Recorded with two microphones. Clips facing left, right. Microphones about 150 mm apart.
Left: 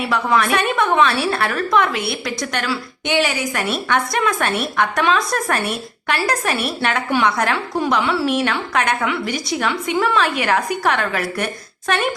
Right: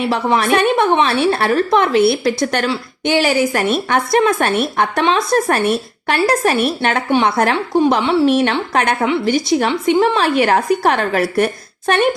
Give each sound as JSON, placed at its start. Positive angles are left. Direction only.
{"t": 0.1, "sound": "a woman's voice", "side_deg": -30}